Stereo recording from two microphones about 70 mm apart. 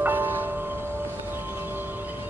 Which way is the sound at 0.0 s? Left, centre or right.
Right.